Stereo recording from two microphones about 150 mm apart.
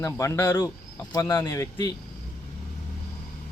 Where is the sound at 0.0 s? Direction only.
20° left (ahead or behind).